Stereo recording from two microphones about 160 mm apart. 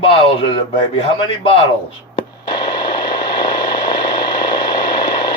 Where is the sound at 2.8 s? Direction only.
30° left (ahead or behind).